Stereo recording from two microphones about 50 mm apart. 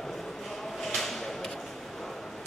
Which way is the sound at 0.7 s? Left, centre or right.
Centre.